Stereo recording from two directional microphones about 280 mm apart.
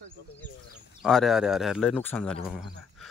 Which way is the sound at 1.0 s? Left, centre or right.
Centre.